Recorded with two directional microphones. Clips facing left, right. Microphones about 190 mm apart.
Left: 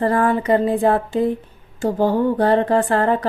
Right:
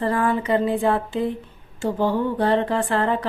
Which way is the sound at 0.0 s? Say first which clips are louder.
Left 4 dB; 40° left (ahead or behind).